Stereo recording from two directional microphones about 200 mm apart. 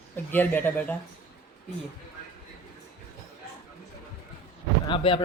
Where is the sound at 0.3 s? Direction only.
10° left (ahead or behind).